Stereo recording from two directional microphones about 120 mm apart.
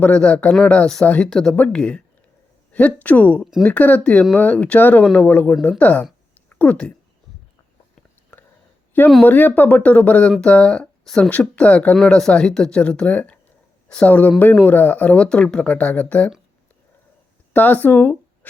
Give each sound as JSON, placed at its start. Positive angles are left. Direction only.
{"t": 0.0, "sound": "speech", "side_deg": 10}
{"t": 6.3, "sound": "a sound", "side_deg": 15}
{"t": 9.2, "sound": "speech", "side_deg": 15}
{"t": 17.5, "sound": "speech", "side_deg": 15}